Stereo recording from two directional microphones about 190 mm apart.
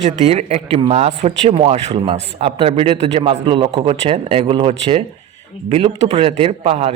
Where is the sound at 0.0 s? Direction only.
35° right (ahead or behind).